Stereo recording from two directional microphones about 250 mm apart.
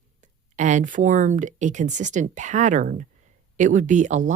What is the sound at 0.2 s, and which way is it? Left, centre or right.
Speech, right.